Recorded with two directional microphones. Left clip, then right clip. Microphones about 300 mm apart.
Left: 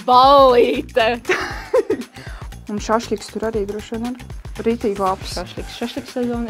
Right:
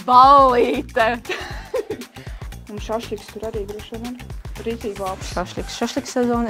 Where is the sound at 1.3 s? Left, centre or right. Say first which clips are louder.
Left 7 dB; left.